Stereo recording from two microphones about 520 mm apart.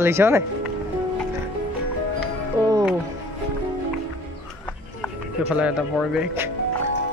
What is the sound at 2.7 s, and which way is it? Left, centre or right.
Music, centre.